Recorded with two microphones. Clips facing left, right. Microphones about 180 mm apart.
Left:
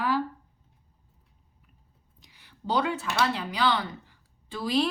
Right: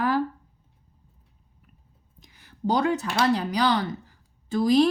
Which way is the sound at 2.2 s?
45° right (ahead or behind).